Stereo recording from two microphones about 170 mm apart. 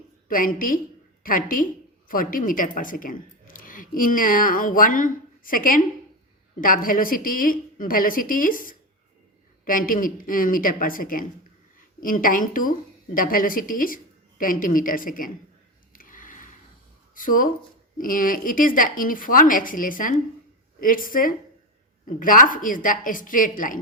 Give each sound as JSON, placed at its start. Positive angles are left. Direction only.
{"t": 0.3, "sound": "a woman's voice", "side_deg": 55}
{"t": 15.9, "sound": "a sound", "side_deg": 55}
{"t": 17.2, "sound": "a woman's voice", "side_deg": 50}